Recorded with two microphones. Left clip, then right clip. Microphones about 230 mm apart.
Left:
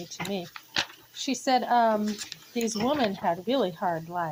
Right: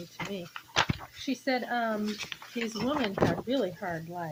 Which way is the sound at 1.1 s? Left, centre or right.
Left.